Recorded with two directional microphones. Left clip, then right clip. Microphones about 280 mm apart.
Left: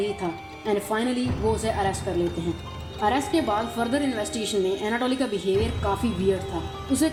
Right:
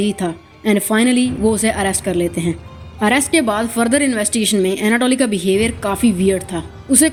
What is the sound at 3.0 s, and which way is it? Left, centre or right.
Speech, right.